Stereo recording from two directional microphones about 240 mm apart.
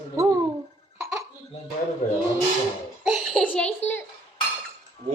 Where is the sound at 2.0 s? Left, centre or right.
Left.